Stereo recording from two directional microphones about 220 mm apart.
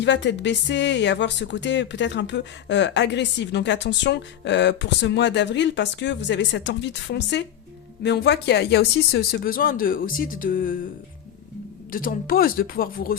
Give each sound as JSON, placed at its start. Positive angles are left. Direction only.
{"t": 0.0, "sound": "speech", "side_deg": 55}
{"t": 11.9, "sound": "speech", "side_deg": 40}